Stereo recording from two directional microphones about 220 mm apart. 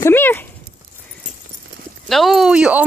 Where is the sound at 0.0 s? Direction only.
10° left (ahead or behind).